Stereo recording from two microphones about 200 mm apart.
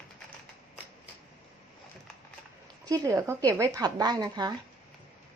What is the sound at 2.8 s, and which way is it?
A woman's voice, 20° right (ahead or behind).